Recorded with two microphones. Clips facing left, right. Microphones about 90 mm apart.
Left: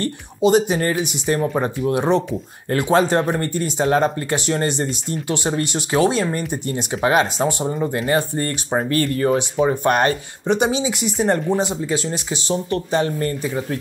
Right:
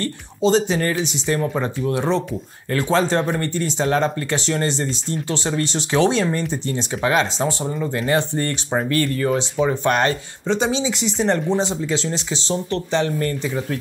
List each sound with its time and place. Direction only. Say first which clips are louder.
0.0 s speech: left 2 dB; 15° left (ahead or behind)
8.7 s speech: left 1 dB; 25° left (ahead or behind)
9.9 s speech: left 1 dB; 15° left (ahead or behind)